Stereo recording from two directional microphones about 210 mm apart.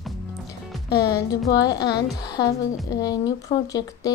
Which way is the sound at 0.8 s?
15° left (ahead or behind).